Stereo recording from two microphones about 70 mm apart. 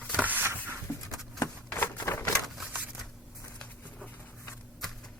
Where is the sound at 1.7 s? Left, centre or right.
Left.